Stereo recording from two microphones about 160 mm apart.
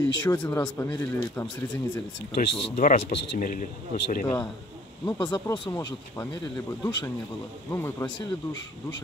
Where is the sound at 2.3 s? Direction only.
60° left (ahead or behind).